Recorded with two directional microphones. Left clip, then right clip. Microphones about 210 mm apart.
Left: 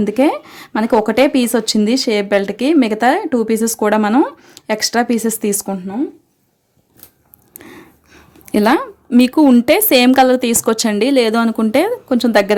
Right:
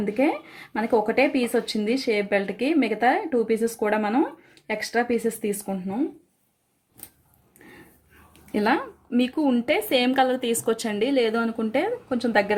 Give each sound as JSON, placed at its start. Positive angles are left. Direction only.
{"t": 0.0, "sound": "a woman's voice", "side_deg": 55}
{"t": 8.5, "sound": "speech", "side_deg": 55}